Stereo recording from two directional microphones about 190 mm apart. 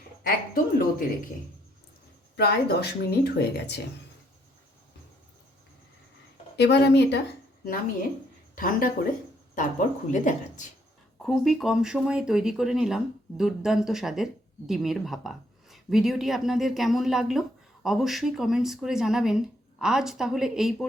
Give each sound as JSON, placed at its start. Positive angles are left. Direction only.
{"t": 0.2, "sound": "a woman's voice", "side_deg": 50}
{"t": 2.3, "sound": "speech", "side_deg": 60}
{"t": 6.6, "sound": "speech", "side_deg": 65}
{"t": 8.5, "sound": "a woman's voice", "side_deg": 45}
{"t": 11.2, "sound": "speech", "side_deg": 0}